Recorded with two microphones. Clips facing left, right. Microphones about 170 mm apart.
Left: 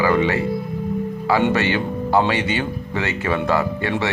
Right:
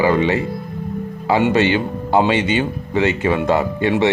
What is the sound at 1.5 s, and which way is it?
Speech, 20° right (ahead or behind).